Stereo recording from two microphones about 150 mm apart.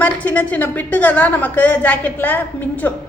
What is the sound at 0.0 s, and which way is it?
A woman's voice, 10° left (ahead or behind).